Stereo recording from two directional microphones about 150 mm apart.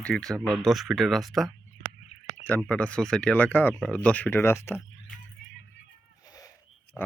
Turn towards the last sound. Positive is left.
turn(degrees=15)  # may be behind; listen again after turning